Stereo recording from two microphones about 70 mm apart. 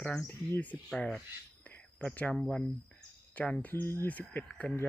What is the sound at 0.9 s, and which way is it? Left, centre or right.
Speech, centre.